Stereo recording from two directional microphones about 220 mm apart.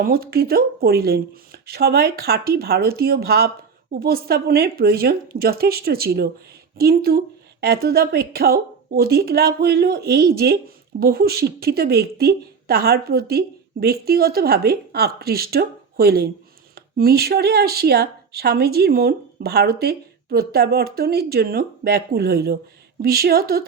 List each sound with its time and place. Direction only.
0.0 s a woman's voice: 45° right (ahead or behind)